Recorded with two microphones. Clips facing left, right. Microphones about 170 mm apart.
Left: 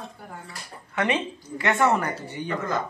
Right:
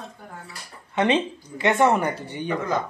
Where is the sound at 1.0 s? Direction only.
20° right (ahead or behind).